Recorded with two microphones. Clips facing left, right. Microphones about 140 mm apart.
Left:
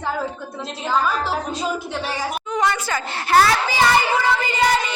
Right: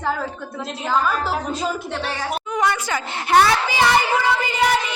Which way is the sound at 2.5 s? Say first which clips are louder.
Even; 10° right (ahead or behind).